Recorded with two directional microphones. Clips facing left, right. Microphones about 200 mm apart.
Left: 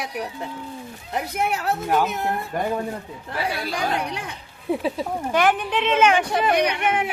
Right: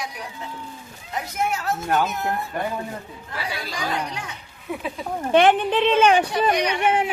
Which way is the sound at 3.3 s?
55° left (ahead or behind).